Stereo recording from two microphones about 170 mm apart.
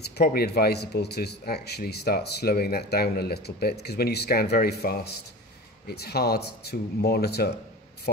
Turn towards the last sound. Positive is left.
turn(degrees=70)  # may be behind; listen again after turning